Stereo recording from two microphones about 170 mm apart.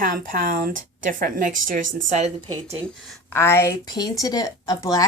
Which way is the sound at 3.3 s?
15° left (ahead or behind).